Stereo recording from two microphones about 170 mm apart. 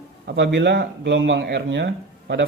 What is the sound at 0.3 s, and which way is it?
Speech, 90° right.